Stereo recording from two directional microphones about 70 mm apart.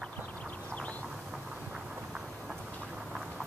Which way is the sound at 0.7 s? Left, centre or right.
Centre.